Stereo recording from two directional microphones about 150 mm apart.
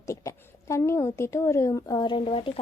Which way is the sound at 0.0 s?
20° left (ahead or behind).